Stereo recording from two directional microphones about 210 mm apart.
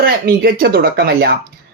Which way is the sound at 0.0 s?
45° right (ahead or behind).